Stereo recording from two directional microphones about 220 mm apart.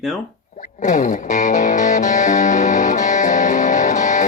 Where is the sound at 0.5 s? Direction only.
35° left (ahead or behind).